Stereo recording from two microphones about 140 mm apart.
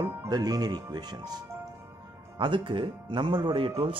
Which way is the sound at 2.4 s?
35° right (ahead or behind).